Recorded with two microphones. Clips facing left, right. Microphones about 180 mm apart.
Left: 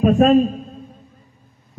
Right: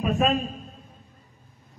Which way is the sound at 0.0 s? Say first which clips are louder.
Left 10 dB; 40° left (ahead or behind).